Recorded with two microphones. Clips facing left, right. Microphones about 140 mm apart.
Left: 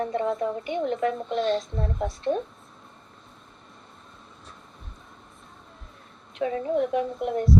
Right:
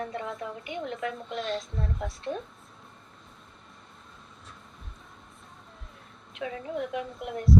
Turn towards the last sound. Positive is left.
turn(degrees=35)  # may be behind; listen again after turning